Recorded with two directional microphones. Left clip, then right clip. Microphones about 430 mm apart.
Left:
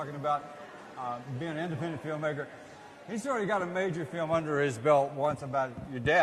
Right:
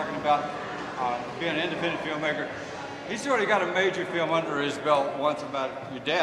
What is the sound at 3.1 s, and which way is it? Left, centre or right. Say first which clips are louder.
Speech: right 6 dB; left.